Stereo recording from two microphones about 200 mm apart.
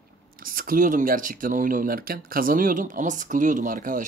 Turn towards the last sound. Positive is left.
turn(degrees=-40)  # may be behind; listen again after turning